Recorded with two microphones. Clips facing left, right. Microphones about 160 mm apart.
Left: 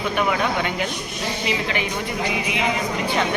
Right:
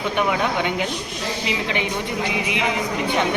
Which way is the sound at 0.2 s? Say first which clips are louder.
Right 1 dB; 15° right (ahead or behind).